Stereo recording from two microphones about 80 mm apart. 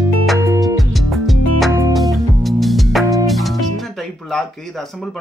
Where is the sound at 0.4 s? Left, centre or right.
Right.